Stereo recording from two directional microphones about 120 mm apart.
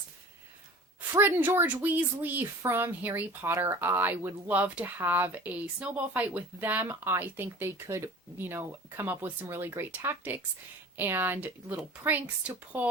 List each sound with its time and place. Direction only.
1.1 s a woman's voice: 20° right (ahead or behind)